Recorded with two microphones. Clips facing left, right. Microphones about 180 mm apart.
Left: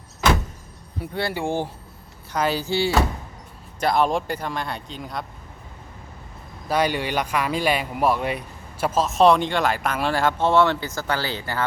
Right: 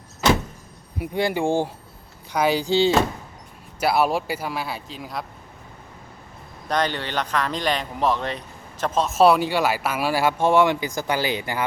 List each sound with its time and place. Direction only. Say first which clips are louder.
0.9 s speech: right 4 dB; 15° right (ahead or behind)
3.8 s speech: even; 5° right (ahead or behind)
6.7 s speech: left 2 dB; 10° left (ahead or behind); by 11.6 s 15° right (ahead or behind)